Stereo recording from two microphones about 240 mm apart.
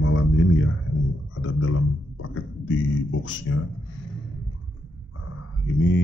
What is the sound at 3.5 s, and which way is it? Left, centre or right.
Speech, left.